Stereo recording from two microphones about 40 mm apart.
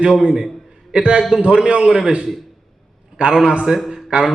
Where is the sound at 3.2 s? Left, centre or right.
Right.